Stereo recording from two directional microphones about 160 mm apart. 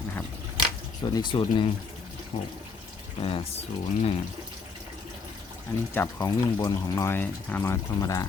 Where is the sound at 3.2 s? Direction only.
35° left (ahead or behind).